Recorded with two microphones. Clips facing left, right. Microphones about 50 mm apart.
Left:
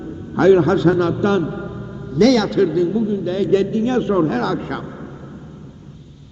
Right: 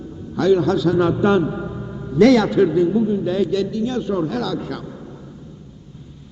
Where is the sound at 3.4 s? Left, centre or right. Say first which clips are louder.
Left 5 dB; left.